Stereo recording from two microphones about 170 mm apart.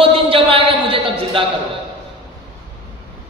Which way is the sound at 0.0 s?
30° right (ahead or behind).